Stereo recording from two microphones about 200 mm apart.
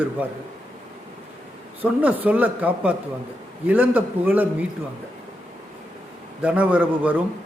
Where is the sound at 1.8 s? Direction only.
10° right (ahead or behind).